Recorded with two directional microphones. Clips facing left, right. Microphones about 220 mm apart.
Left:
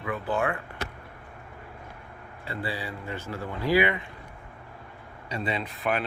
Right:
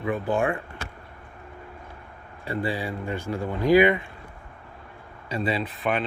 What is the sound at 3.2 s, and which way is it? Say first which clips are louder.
Speech: right 6 dB; 15° right (ahead or behind).